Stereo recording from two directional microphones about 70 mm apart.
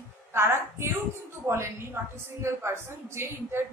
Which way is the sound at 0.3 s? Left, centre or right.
Right.